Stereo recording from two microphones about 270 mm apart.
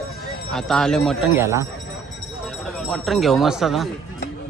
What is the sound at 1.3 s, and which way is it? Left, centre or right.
Speech, centre.